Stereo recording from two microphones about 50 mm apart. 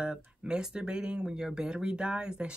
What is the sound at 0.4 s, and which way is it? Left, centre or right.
Speech, centre.